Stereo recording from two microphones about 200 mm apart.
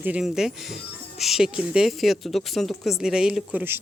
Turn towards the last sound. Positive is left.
turn(degrees=-5)  # may be behind; listen again after turning